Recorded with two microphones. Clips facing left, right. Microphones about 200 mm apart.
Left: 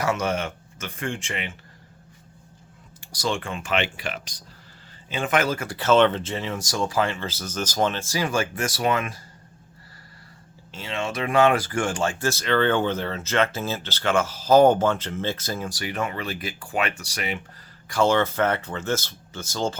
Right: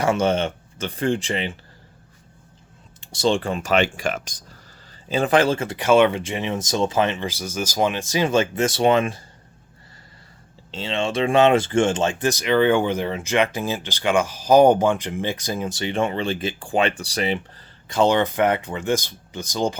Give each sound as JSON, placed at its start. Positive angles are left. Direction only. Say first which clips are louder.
{"t": 0.0, "sound": "speech", "louder": "right 5 dB", "side_deg": -30}
{"t": 3.0, "sound": "speech", "louder": "right 7 dB", "side_deg": -25}
{"t": 5.0, "sound": "speech", "louder": "right 5 dB", "side_deg": -35}
{"t": 10.7, "sound": "speech", "louder": "right 5 dB", "side_deg": -25}
{"t": 17.8, "sound": "speech", "louder": "right 2 dB", "side_deg": -20}